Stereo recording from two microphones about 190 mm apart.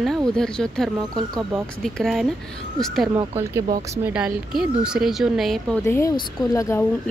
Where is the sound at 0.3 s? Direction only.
5° left (ahead or behind).